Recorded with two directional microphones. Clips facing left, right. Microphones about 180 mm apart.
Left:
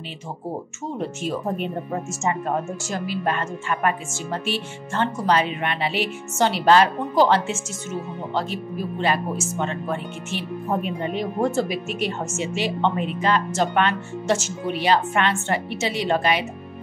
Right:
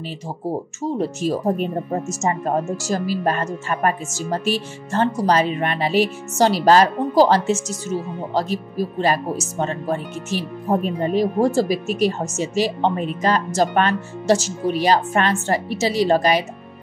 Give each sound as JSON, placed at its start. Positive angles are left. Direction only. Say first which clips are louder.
{"t": 0.8, "sound": "speech", "louder": "right 6 dB", "side_deg": -35}